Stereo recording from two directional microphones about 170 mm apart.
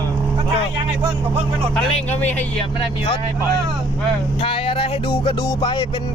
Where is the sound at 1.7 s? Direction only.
10° left (ahead or behind).